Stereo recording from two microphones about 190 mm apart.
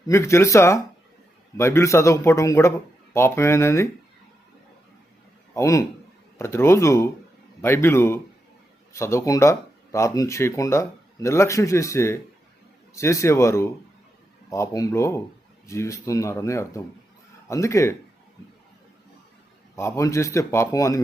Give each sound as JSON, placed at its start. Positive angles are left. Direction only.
{"t": 0.1, "sound": "speech", "side_deg": 15}
{"t": 5.5, "sound": "speech", "side_deg": 15}
{"t": 19.7, "sound": "speech", "side_deg": 15}